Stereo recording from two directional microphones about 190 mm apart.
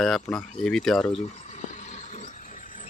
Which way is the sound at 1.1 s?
40° left (ahead or behind).